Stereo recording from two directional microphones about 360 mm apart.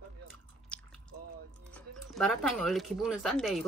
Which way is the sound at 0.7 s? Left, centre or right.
Centre.